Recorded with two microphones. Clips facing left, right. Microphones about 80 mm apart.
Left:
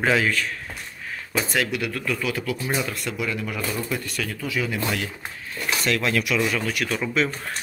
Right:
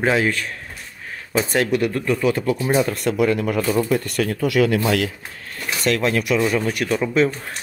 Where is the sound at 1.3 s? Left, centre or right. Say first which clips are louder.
Right 6 dB; right.